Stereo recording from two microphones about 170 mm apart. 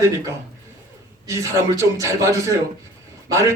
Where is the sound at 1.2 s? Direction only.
15° right (ahead or behind).